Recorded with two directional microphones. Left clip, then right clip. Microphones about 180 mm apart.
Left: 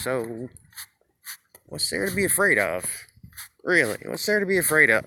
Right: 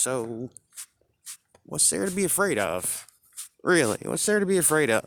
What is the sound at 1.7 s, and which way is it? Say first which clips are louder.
Speech: left 1 dB; 40° right (ahead or behind).